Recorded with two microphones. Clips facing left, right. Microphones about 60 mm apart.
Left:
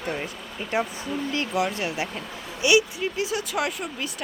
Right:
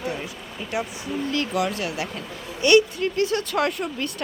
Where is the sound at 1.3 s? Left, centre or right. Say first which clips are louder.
Right 1 dB; left.